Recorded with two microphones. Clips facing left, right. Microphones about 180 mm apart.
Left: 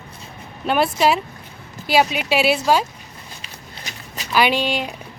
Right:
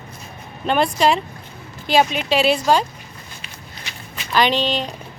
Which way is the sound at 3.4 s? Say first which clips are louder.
Even; 40° left (ahead or behind).